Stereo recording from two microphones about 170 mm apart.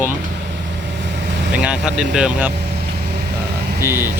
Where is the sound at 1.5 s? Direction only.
5° right (ahead or behind).